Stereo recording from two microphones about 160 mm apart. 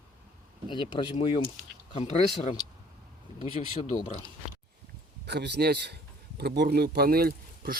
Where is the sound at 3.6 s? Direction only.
40° left (ahead or behind).